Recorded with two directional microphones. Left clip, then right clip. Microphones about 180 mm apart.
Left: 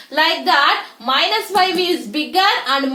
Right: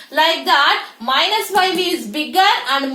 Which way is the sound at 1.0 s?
40° left (ahead or behind).